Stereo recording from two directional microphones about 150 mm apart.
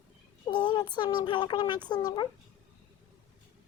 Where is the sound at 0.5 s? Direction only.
30° left (ahead or behind).